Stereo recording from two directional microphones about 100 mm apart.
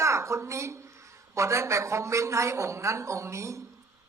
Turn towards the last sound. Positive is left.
turn(degrees=-30)  # may be behind; listen again after turning